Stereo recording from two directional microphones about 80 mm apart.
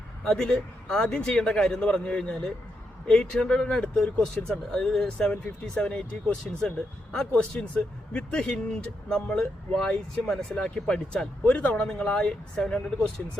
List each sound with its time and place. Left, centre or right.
0.3 s speech: centre